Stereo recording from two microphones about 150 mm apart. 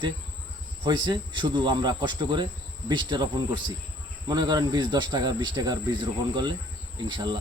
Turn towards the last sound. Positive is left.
turn(degrees=-30)  # may be behind; listen again after turning